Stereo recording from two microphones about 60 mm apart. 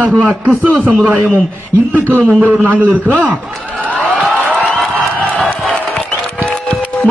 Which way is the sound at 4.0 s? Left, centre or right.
Centre.